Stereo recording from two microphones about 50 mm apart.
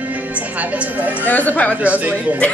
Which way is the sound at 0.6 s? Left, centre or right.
Right.